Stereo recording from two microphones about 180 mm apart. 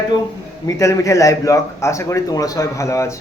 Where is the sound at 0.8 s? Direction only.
15° left (ahead or behind).